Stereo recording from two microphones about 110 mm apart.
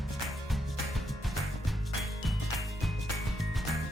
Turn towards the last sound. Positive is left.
turn(degrees=0)  # may be behind; listen again after turning